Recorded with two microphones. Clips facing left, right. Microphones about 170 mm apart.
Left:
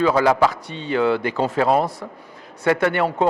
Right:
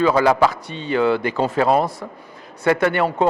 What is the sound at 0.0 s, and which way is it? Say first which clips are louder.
A man's voice: right 1 dB; 20° right (ahead or behind).